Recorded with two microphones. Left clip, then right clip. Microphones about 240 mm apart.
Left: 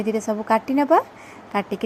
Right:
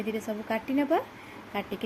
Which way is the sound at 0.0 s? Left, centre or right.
Centre.